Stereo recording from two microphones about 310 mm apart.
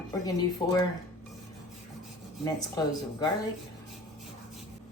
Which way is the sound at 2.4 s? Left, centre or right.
Centre.